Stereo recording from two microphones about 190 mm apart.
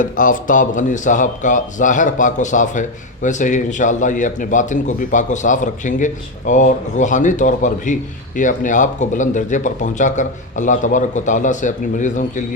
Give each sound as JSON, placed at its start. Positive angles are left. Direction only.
{"t": 0.0, "sound": "speech", "side_deg": 45}